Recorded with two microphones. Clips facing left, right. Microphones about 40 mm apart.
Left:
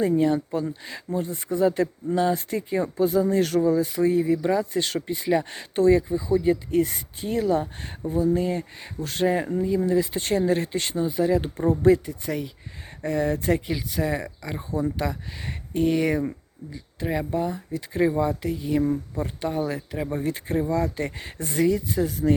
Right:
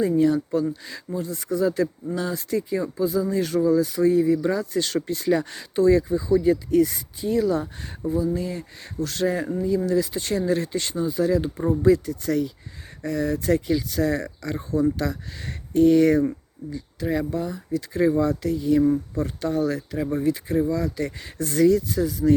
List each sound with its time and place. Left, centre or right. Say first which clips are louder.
0.0 s speech: right 1 dB; left
3.6 s speech: right 2 dB; left
4.4 s speech: left 1 dB; left
4.6 s speech: right 1 dB; left
4.9 s speech: right 2 dB; left
5.5 s speech: even; left
6.0 s speech: right 2 dB; left
12.0 s speech: right 5 dB; centre
13.0 s speech: left 1 dB; left
13.7 s speech: right 4 dB; centre
22.0 s speech: right 2 dB; left